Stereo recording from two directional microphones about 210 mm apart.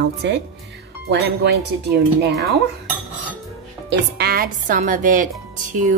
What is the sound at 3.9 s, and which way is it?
A woman's voice, 50° right (ahead or behind).